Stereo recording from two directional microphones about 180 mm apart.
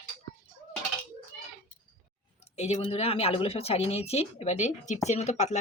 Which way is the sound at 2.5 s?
40° left (ahead or behind).